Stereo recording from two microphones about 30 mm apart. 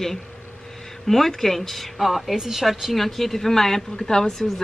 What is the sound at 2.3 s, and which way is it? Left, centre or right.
Speech, centre.